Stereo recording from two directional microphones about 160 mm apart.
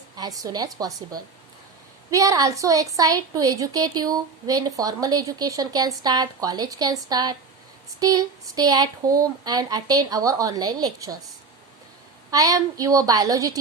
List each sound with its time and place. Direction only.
0.2 s a woman's voice: 25° right (ahead or behind)
12.3 s a woman's voice: 20° right (ahead or behind)